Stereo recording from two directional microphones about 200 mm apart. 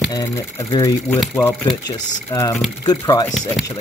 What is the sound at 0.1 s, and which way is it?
Speech, 15° left (ahead or behind).